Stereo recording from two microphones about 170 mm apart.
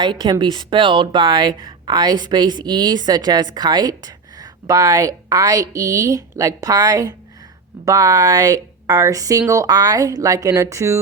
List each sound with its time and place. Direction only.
0.0 s speech: 25° right (ahead or behind)